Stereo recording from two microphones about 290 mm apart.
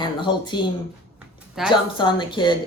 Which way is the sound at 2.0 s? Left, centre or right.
Centre.